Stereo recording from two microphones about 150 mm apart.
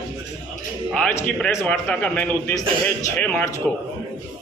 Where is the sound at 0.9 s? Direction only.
5° left (ahead or behind).